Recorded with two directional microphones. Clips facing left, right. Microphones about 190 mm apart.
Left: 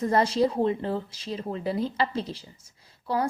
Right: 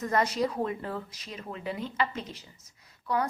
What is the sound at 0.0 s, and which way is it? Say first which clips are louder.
A woman's voice: left 5 dB; 30° left (ahead or behind).